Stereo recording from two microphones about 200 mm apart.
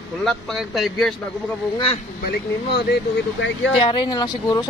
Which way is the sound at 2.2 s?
50° left (ahead or behind).